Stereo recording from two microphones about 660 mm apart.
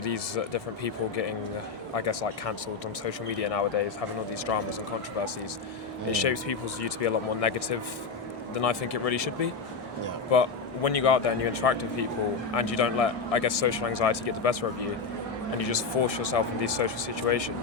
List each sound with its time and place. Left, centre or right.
0.0 s speech: left
6.1 s speech: left